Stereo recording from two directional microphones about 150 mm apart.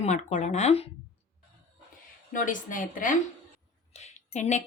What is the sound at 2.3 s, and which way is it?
Speech, 60° left (ahead or behind).